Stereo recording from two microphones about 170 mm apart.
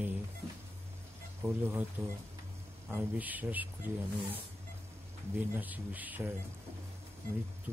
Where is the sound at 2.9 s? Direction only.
10° right (ahead or behind).